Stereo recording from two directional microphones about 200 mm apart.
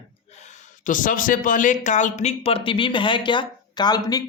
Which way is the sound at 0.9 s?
40° left (ahead or behind).